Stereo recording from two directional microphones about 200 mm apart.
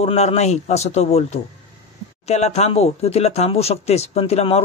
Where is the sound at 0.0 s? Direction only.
35° left (ahead or behind).